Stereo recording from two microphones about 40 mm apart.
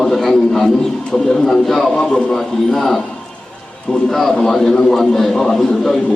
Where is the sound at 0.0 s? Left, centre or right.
Centre.